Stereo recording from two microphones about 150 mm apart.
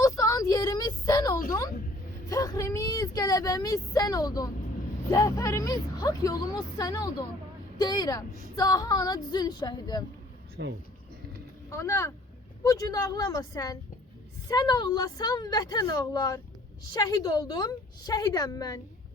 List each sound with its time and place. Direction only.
0.0 s a sound: 20° left (ahead or behind)
3.2 s a woman's voice: 25° left (ahead or behind)
11.7 s a woman's voice: 20° left (ahead or behind)